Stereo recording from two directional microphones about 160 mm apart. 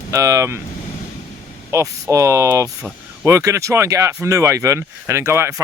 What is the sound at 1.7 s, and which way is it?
Speech, 20° right (ahead or behind).